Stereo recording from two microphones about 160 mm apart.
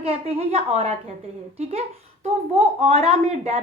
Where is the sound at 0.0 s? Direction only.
40° right (ahead or behind).